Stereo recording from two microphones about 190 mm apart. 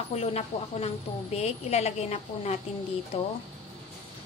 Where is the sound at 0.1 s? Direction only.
35° left (ahead or behind).